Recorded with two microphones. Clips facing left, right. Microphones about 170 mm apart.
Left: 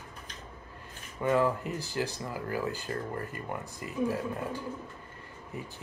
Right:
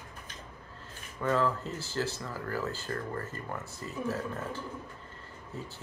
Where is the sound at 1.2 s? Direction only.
15° left (ahead or behind).